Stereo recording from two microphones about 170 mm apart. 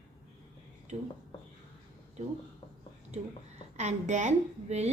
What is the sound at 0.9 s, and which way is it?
Speech, 40° right (ahead or behind).